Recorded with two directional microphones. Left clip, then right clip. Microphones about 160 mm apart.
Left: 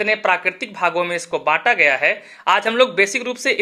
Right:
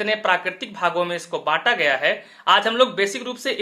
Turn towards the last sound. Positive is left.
turn(degrees=35)  # may be behind; listen again after turning